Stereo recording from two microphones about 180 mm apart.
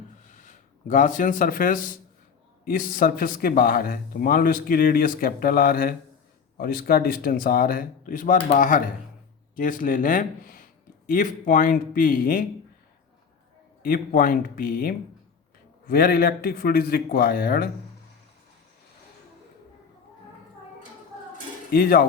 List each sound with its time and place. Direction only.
0.3 s speech: 45° left (ahead or behind)
13.8 s speech: 50° left (ahead or behind)
21.7 s speech: 55° left (ahead or behind)